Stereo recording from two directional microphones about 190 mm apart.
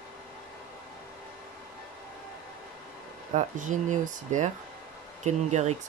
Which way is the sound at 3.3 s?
40° right (ahead or behind).